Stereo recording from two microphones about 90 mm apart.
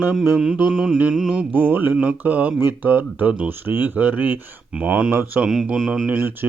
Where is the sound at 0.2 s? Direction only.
10° right (ahead or behind).